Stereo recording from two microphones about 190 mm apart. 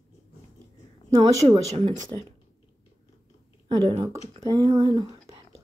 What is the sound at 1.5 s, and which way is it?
Speech, 35° right (ahead or behind).